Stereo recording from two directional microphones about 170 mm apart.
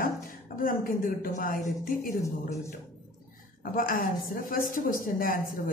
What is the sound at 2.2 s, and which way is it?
Speech, 15° left (ahead or behind).